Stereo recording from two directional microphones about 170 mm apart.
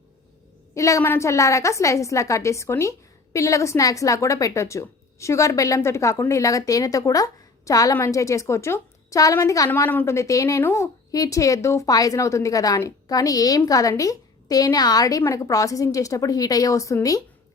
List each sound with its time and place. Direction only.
0.7 s a woman's voice: 20° left (ahead or behind)